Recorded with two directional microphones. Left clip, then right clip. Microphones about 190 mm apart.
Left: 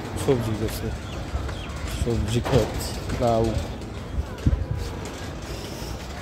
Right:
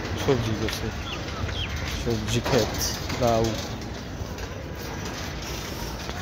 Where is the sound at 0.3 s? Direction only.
15° left (ahead or behind).